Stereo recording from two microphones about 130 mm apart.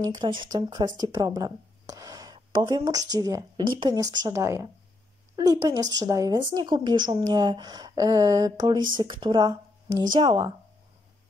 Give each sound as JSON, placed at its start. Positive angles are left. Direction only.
{"t": 0.0, "sound": "a woman's voice", "side_deg": -35}